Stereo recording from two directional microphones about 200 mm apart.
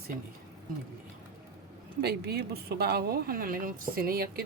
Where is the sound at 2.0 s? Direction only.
55° right (ahead or behind).